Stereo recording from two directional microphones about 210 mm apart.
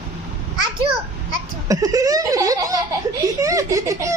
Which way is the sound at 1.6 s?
15° right (ahead or behind).